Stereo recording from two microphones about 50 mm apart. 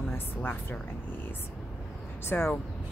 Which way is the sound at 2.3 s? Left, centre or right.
Left.